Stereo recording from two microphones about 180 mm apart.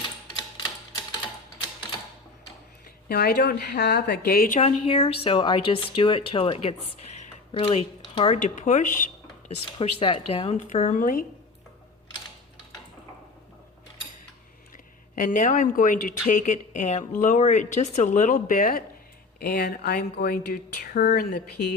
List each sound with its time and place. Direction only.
3.1 s speech: 60° left (ahead or behind)
4.9 s speech: 35° left (ahead or behind)
8.4 s speech: 45° left (ahead or behind)
10.0 s speech: 30° left (ahead or behind); by 11.3 s 50° left (ahead or behind)
15.1 s speech: 45° left (ahead or behind)